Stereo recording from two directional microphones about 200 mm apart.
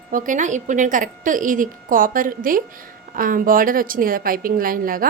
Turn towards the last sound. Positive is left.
turn(degrees=-45)  # may be behind; listen again after turning